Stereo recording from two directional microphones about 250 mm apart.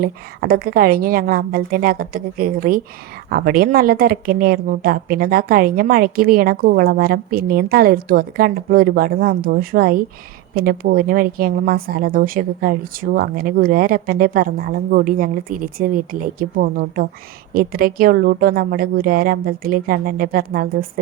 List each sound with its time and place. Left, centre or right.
0.0 s a woman's voice: right